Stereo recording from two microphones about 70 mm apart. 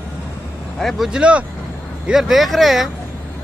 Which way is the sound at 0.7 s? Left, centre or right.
Centre.